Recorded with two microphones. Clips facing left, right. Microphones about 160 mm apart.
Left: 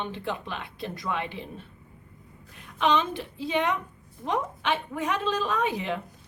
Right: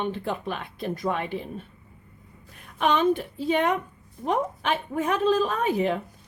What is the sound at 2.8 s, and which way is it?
Speech, 50° right (ahead or behind).